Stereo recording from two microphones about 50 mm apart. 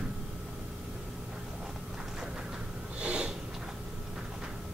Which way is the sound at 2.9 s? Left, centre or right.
Right.